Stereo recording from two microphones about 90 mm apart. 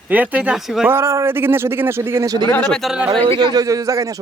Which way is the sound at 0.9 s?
30° right (ahead or behind).